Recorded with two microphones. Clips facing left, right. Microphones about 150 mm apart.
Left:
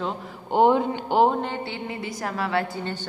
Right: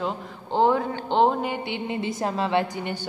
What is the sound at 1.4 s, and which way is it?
Speech, 15° right (ahead or behind).